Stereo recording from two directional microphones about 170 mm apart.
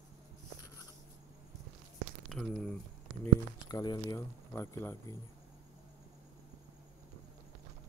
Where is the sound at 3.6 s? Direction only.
25° left (ahead or behind).